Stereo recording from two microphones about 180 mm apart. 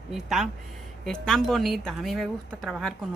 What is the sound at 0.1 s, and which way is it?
Speech, centre (ahead or behind).